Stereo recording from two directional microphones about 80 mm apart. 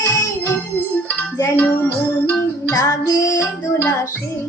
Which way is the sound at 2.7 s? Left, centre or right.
Left.